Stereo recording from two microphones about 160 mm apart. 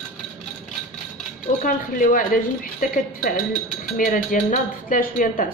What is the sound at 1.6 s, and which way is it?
Speech, 60° left (ahead or behind).